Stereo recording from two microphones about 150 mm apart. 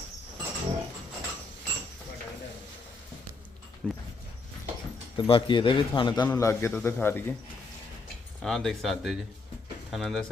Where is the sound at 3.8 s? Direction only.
10° left (ahead or behind).